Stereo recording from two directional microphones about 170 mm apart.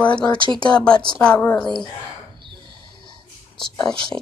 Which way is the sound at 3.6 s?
5° left (ahead or behind).